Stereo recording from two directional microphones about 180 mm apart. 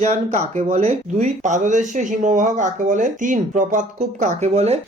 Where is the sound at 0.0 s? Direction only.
40° right (ahead or behind).